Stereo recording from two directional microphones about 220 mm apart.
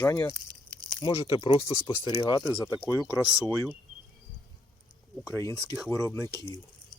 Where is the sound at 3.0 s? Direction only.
Centre (ahead or behind).